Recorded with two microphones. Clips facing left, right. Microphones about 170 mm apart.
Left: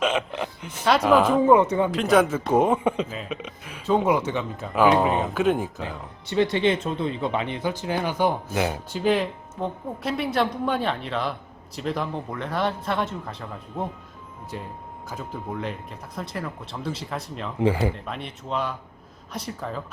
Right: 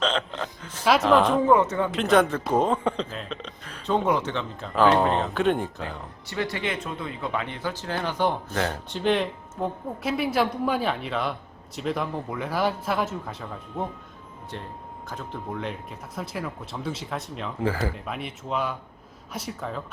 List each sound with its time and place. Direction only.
0.0 s a sound: 10° left (ahead or behind)
0.9 s speech: centre (ahead or behind)
1.5 s speech: 15° left (ahead or behind)
1.9 s speech: centre (ahead or behind)
6.2 s speech: 25° left (ahead or behind); by 17.5 s centre (ahead or behind)
17.6 s speech: 20° left (ahead or behind)
17.9 s speech: 5° right (ahead or behind)